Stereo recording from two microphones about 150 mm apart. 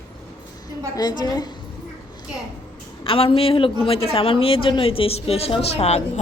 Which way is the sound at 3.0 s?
35° left (ahead or behind).